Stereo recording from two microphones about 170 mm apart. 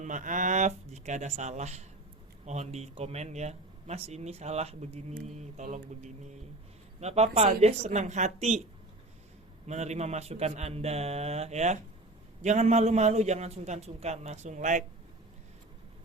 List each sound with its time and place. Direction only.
0.0 s speech: 50° right (ahead or behind)
9.6 s speech: 40° right (ahead or behind)